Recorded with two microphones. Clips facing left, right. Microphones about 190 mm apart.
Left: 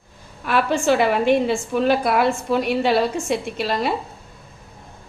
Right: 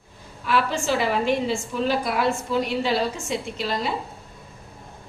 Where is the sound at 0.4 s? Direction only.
55° left (ahead or behind).